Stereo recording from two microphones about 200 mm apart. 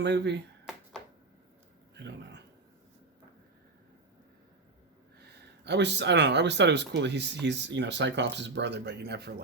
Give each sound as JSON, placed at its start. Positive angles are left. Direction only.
{"t": 0.0, "sound": "speech", "side_deg": -60}
{"t": 5.6, "sound": "speech", "side_deg": -60}